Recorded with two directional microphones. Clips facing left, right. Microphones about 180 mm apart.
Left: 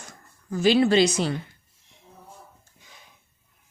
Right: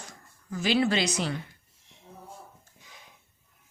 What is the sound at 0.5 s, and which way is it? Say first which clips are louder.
Speech: left 7 dB; 30° left (ahead or behind).